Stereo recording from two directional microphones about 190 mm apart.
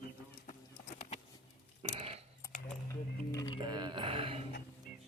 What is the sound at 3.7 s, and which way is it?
Mantra, 25° right (ahead or behind).